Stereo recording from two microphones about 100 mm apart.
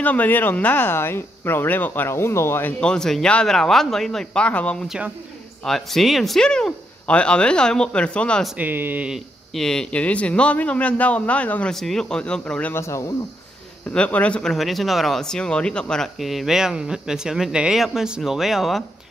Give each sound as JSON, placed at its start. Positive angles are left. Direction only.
{"t": 0.0, "sound": "speech", "side_deg": 15}
{"t": 2.8, "sound": "speech", "side_deg": 5}
{"t": 4.8, "sound": "speech", "side_deg": -10}
{"t": 5.6, "sound": "speech", "side_deg": 5}
{"t": 8.5, "sound": "speech", "side_deg": -20}
{"t": 9.1, "sound": "speech", "side_deg": 0}
{"t": 11.7, "sound": "speech", "side_deg": 5}
{"t": 12.7, "sound": "speech", "side_deg": 30}
{"t": 13.8, "sound": "speech", "side_deg": 15}